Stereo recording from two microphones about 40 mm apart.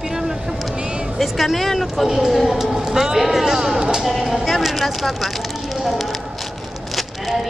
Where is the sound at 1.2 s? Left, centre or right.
Centre.